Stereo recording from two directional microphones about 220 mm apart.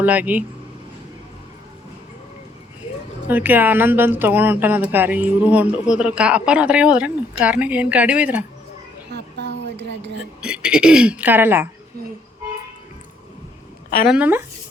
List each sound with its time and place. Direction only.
0.0 s a woman's voice: 5° right (ahead or behind)
3.2 s a woman's voice: 10° right (ahead or behind)
9.1 s a sound: 50° right (ahead or behind)
10.4 s speech: 5° right (ahead or behind)
14.1 s a woman's voice: 5° right (ahead or behind)